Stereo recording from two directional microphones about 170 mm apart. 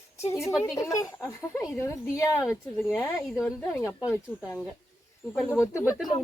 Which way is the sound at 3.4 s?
15° left (ahead or behind).